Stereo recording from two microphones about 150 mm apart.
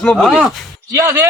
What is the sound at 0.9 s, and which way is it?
Speech, 20° right (ahead or behind).